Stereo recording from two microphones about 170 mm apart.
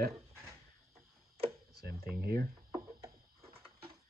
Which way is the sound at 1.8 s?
65° right (ahead or behind).